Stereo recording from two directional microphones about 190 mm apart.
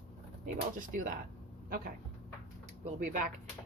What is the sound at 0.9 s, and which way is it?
A woman's voice, 45° right (ahead or behind).